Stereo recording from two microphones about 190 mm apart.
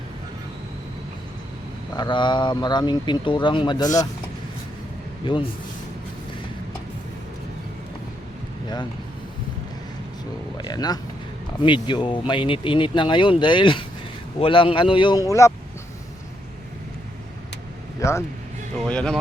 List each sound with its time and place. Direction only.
2.0 s speech: 25° left (ahead or behind)
5.2 s speech: 25° left (ahead or behind)
8.6 s speech: 20° left (ahead or behind)
10.6 s speech: 20° left (ahead or behind)
18.9 s speech: 5° left (ahead or behind)